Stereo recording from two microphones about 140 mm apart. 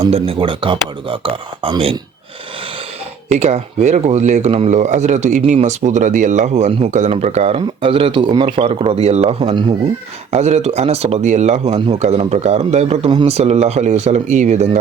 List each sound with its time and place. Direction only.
0.0 s speech: 40° right (ahead or behind)
3.2 s speech: 50° right (ahead or behind)
10.3 s speech: 50° right (ahead or behind)